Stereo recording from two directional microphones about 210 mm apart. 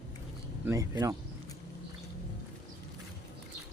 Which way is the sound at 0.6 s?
15° right (ahead or behind).